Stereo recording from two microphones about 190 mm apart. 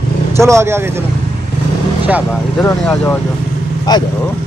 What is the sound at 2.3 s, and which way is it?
Speech, 10° left (ahead or behind).